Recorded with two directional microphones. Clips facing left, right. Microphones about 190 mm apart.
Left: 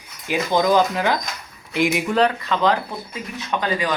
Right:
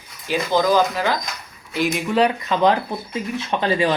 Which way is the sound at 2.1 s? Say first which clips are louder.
Right 1 dB; 10° right (ahead or behind).